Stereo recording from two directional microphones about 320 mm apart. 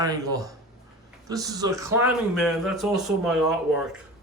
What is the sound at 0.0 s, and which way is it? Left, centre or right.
Speech, centre.